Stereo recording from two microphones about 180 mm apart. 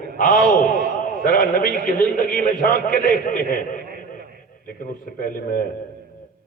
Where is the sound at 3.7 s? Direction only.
55° right (ahead or behind).